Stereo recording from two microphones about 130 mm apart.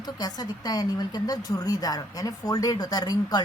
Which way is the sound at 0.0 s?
30° left (ahead or behind).